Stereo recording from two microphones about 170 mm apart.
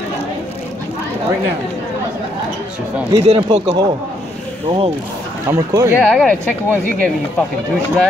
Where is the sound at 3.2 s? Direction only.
35° right (ahead or behind).